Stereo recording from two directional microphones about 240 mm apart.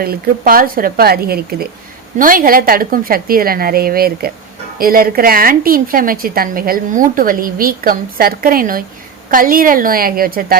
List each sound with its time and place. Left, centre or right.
0.0 s a woman's voice: right